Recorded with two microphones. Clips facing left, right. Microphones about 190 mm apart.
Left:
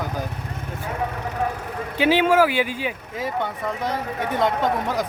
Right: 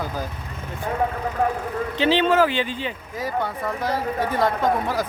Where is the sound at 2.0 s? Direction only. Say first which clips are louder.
Left 1 dB; 10° left (ahead or behind).